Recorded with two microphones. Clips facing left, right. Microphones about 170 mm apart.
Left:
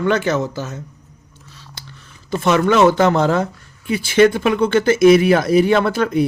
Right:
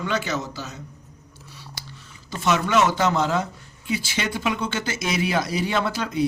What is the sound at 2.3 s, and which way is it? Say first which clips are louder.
Speech: left 7 dB; 55° left (ahead or behind).